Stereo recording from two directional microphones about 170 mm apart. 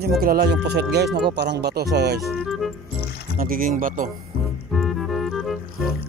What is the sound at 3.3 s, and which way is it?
Speech, 55° right (ahead or behind).